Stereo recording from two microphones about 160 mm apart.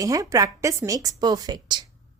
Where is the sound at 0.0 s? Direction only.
20° right (ahead or behind).